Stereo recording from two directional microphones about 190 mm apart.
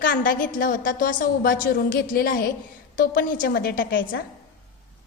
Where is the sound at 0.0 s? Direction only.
45° left (ahead or behind).